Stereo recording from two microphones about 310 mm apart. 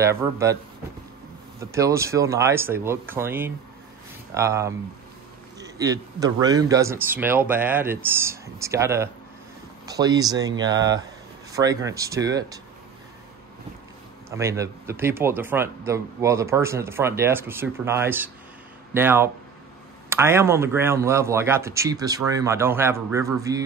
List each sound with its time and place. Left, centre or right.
0.0 s speech: centre
1.6 s speech: centre
14.3 s speech: centre